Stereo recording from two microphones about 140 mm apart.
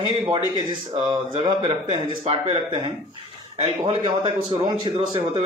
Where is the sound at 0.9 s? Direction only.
40° right (ahead or behind).